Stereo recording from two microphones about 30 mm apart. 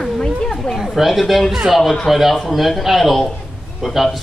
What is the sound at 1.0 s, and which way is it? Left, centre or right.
Speech, centre.